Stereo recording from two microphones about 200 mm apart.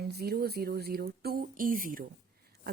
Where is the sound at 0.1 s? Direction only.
50° right (ahead or behind).